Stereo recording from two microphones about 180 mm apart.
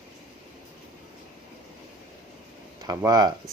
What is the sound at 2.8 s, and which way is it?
Speech, 20° right (ahead or behind).